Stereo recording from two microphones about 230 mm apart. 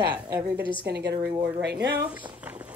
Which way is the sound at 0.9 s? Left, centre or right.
Right.